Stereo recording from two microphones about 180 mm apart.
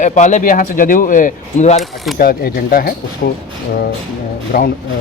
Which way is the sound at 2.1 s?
55° left (ahead or behind).